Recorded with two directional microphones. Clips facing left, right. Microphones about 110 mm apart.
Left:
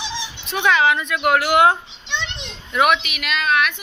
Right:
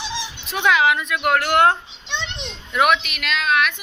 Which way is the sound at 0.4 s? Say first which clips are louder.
Left 1 dB; 5° right (ahead or behind).